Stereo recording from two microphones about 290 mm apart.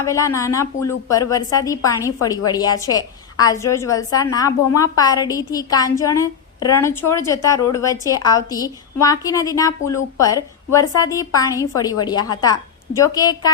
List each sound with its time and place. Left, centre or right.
0.0 s a woman's voice: centre